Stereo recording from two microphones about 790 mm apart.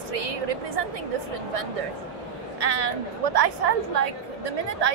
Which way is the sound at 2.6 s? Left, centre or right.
Right.